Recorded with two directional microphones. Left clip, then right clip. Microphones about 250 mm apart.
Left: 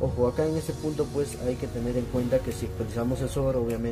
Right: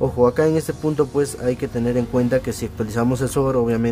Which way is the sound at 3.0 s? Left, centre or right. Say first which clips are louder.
Right 9 dB; right.